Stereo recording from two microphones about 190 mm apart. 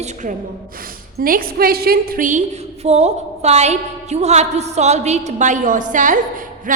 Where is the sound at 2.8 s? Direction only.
35° right (ahead or behind).